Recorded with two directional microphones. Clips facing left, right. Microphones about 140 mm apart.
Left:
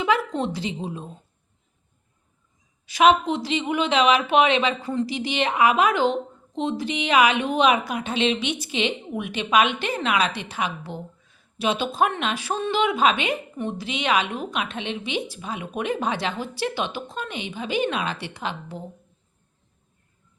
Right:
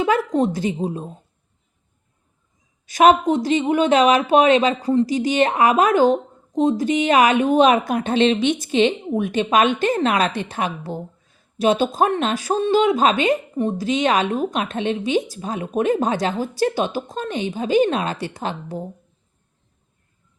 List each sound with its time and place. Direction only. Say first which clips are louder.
0.0 s speech: right 5 dB; 40° right (ahead or behind)
2.8 s speech: right 4 dB; 45° right (ahead or behind)